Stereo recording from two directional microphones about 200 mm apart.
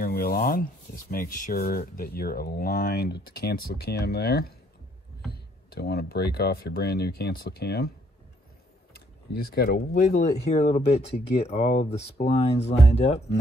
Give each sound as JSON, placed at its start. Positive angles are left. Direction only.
{"t": 0.0, "sound": "speech", "side_deg": 45}
{"t": 8.9, "sound": "a sound", "side_deg": 50}
{"t": 9.9, "sound": "speech", "side_deg": 35}
{"t": 12.2, "sound": "speech", "side_deg": 45}
{"t": 12.9, "sound": "speech", "side_deg": 30}